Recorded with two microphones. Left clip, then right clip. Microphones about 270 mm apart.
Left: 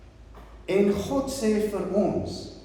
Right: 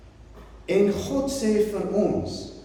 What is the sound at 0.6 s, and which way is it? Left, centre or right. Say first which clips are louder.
Speech: right 1 dB; centre.